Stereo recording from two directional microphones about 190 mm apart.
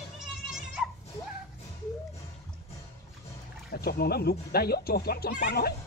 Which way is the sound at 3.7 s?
55° left (ahead or behind).